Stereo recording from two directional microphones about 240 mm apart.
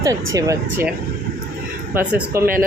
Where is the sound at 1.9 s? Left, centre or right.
Centre.